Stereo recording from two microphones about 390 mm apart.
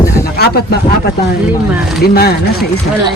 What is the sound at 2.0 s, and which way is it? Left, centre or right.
Speech, left.